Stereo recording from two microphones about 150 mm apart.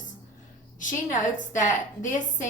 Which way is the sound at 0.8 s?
60° left (ahead or behind).